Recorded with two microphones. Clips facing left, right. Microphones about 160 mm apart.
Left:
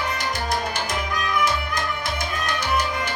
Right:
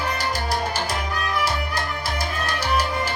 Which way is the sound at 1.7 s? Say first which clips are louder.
Even; 35° right (ahead or behind).